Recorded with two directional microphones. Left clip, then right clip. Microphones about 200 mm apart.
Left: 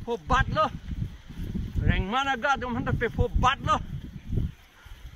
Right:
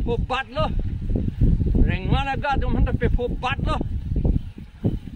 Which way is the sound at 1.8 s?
5° right (ahead or behind).